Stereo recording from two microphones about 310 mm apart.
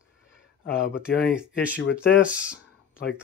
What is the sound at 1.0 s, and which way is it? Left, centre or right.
Speech, centre.